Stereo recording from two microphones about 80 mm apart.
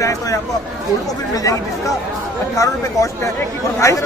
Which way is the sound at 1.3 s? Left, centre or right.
Left.